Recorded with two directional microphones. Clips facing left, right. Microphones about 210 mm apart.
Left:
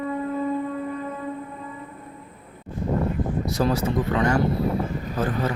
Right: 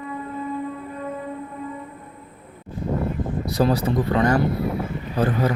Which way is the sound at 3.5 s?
35° right (ahead or behind).